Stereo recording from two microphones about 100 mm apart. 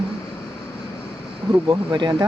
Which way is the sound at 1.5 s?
45° right (ahead or behind).